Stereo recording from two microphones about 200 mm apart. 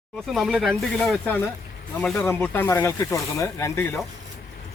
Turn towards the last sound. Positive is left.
turn(degrees=15)  # may be behind; listen again after turning